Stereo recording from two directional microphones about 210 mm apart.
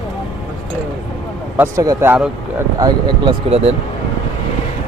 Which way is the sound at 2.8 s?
20° right (ahead or behind).